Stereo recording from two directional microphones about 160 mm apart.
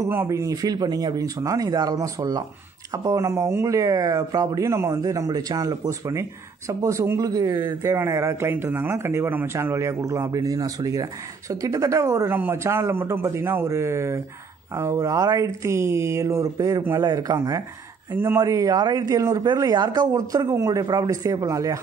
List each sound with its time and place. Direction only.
0.0 s speech: 15° right (ahead or behind)